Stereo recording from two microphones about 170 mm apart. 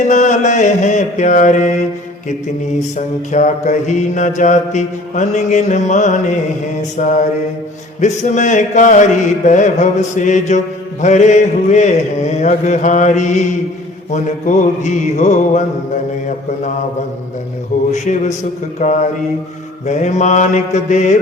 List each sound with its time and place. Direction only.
0.0 s mantra: 45° left (ahead or behind)
3.3 s mantra: 45° left (ahead or behind)
17.9 s mantra: 45° left (ahead or behind)